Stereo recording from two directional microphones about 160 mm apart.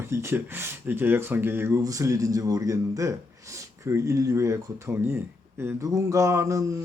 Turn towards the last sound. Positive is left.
turn(degrees=-20)  # may be behind; listen again after turning